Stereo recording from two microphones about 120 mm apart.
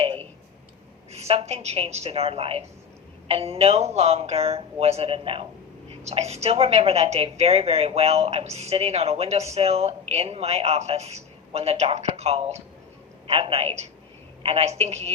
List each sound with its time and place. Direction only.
1.1 s a woman's voice: 60° right (ahead or behind)
5.9 s a woman's voice: 65° right (ahead or behind)